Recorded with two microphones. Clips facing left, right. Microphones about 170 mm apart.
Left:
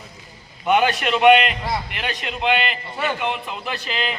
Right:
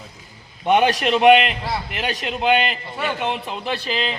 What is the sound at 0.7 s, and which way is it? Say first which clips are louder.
Speech: right 2 dB; 35° right (ahead or behind).